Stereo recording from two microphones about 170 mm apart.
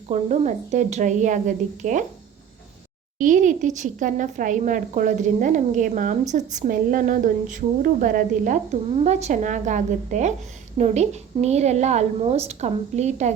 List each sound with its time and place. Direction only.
0.1 s a woman's voice: 45° right (ahead or behind)
3.2 s a woman's voice: 50° right (ahead or behind)